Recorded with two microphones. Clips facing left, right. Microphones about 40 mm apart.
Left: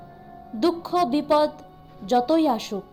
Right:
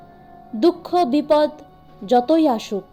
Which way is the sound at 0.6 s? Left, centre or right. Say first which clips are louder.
Right 5 dB; right.